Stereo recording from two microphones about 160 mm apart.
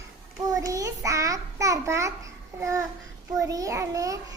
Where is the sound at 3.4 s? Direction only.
20° right (ahead or behind).